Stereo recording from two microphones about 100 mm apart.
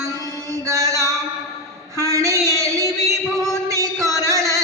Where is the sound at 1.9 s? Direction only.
30° right (ahead or behind).